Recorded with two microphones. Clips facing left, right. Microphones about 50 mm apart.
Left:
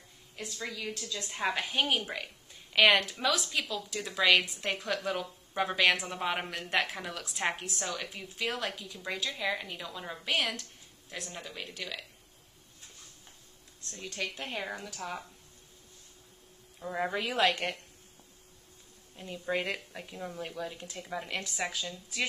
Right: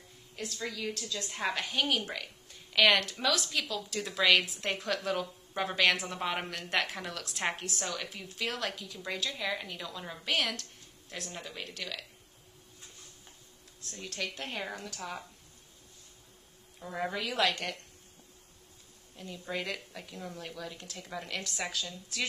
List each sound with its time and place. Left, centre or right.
0.4 s a woman's voice: centre
2.0 s a sound: centre
2.8 s speech: centre
13.8 s speech: centre
16.8 s a woman's voice: centre; by 17.7 s left
19.1 s a woman's voice: centre
20.0 s a woman's voice: centre